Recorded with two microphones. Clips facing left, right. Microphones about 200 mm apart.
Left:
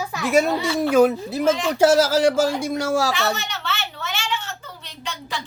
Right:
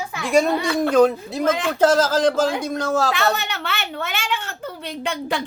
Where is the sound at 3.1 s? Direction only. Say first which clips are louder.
Right 2 dB; 60° right (ahead or behind).